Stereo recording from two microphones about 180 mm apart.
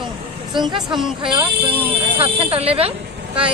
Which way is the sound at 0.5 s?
25° right (ahead or behind).